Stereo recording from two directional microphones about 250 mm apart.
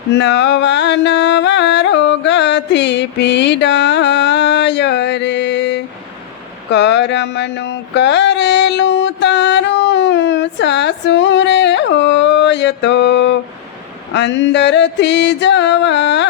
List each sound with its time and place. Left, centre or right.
0.1 s music: left
6.7 s a sound: left
14.1 s music: left